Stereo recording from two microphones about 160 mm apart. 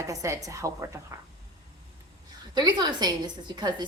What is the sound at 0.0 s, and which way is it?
Speech, 20° right (ahead or behind).